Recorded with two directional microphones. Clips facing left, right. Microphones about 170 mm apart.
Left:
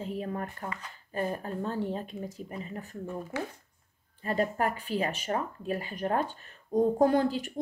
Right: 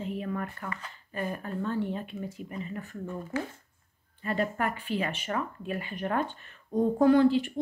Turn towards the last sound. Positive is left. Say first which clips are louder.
# right 4 dB
turn(degrees=45)  # may be behind; listen again after turning